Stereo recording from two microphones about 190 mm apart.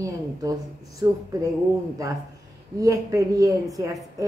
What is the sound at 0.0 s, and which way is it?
Speech, 15° right (ahead or behind).